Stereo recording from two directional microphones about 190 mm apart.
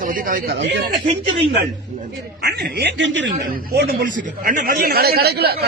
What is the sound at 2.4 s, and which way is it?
Speech, 55° right (ahead or behind).